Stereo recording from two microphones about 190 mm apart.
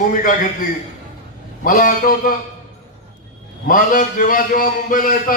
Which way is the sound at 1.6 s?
45° left (ahead or behind).